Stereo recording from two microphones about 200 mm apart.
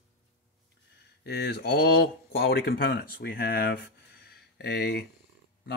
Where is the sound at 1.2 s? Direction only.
55° left (ahead or behind).